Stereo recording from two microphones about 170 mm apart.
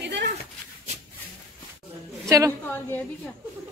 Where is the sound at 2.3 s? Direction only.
20° right (ahead or behind).